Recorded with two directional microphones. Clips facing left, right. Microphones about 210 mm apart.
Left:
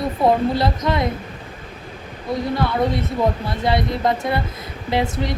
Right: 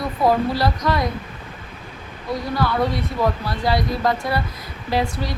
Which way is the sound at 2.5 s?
20° left (ahead or behind).